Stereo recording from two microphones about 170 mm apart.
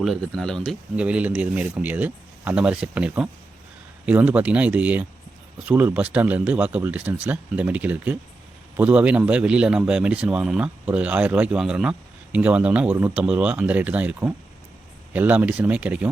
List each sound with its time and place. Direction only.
0.0 s a man's voice: centre (ahead or behind)